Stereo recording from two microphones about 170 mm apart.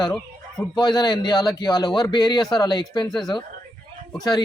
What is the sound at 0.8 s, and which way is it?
Speech, 25° left (ahead or behind).